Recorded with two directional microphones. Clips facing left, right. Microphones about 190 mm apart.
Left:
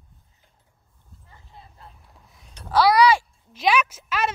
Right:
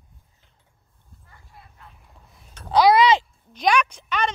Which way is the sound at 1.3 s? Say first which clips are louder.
Left 2 dB; 25° left (ahead or behind).